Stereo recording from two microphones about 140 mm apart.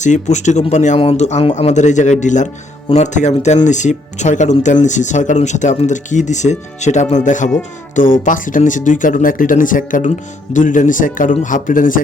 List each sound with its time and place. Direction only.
0.0 s speech: 60° left (ahead or behind)
0.9 s speech: 45° left (ahead or behind); by 11.9 s 75° left (ahead or behind)